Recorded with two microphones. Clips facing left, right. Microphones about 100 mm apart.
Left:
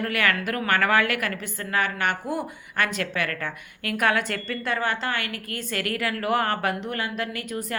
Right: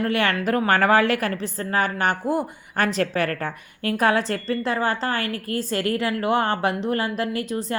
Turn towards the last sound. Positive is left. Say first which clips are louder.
# right 5 dB
turn(degrees=-30)  # may be behind; listen again after turning